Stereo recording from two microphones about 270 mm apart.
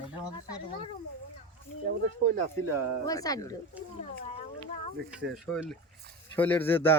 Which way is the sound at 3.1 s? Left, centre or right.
Centre.